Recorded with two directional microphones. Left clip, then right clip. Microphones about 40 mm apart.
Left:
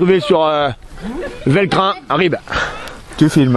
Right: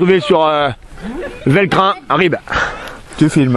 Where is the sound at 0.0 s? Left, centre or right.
Right.